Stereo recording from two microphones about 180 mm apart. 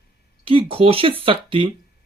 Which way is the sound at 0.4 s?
30° right (ahead or behind).